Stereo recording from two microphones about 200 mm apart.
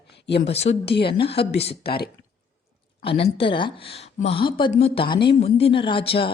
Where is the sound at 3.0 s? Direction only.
30° left (ahead or behind).